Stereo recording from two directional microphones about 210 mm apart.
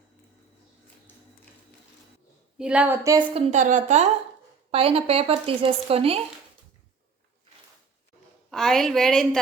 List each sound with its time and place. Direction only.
2.6 s a woman's voice: 5° right (ahead or behind); by 6.2 s 25° right (ahead or behind)
8.4 s a woman's voice: centre (ahead or behind)